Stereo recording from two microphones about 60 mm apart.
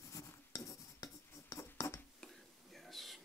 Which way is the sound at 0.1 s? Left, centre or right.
Left.